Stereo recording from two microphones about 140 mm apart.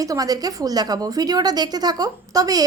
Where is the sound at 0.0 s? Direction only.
25° right (ahead or behind).